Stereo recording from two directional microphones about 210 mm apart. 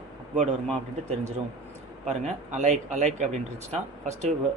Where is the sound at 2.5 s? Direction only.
35° right (ahead or behind).